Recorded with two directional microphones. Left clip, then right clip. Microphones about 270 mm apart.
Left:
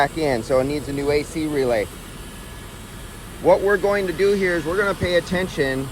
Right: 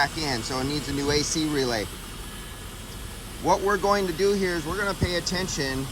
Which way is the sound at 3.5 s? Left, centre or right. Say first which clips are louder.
Left 5 dB; centre.